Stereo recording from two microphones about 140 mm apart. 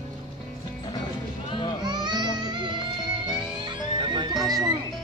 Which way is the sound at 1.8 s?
30° right (ahead or behind).